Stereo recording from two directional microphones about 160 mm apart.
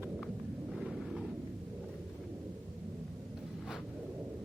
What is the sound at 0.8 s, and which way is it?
Thunder, centre (ahead or behind).